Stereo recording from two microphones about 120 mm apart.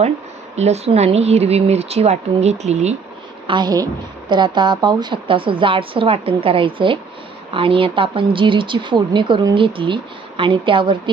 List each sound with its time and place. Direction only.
0.5 s speech: 65° right (ahead or behind)
3.4 s a woman's voice: 40° right (ahead or behind)